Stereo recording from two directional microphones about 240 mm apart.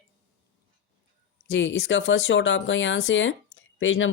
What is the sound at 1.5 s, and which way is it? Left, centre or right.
Speech, left.